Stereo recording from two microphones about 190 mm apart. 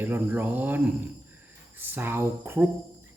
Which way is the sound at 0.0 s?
10° right (ahead or behind).